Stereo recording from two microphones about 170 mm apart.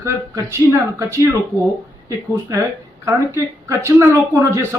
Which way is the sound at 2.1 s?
20° right (ahead or behind).